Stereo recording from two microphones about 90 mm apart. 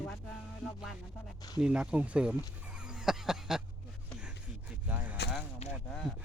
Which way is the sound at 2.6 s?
10° right (ahead or behind).